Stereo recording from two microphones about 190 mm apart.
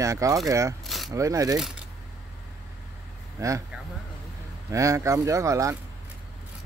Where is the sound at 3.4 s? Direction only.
15° right (ahead or behind).